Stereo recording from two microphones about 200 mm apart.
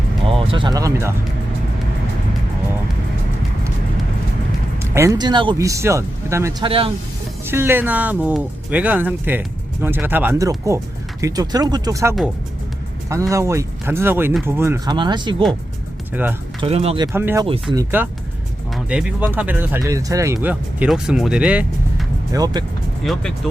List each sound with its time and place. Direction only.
0.3 s speech: 25° right (ahead or behind)
4.8 s speech: 15° right (ahead or behind)
6.7 s speech: 30° right (ahead or behind)
7.4 s speech: 10° right (ahead or behind)
16.2 s speech: 10° right (ahead or behind)
16.6 s speech: 30° right (ahead or behind)
17.1 s speech: 10° right (ahead or behind)
17.4 s speech: 25° right (ahead or behind)
18.9 s speech: 5° right (ahead or behind)